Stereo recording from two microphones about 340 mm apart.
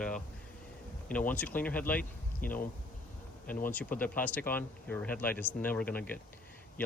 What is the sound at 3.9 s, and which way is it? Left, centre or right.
Speech, centre.